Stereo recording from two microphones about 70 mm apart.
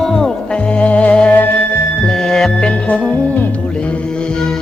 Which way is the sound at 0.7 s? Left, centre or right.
Centre.